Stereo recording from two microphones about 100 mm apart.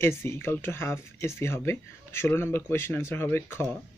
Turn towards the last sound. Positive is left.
turn(degrees=25)  # may be behind; listen again after turning